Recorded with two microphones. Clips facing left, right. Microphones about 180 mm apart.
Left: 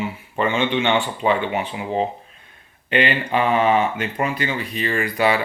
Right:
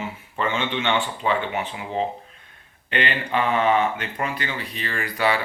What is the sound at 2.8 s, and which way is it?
Speech, 15° left (ahead or behind).